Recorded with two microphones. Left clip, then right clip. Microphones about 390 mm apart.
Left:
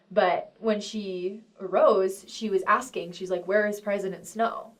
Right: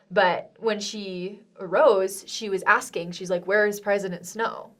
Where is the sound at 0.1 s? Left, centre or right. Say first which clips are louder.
Right 2 dB; right.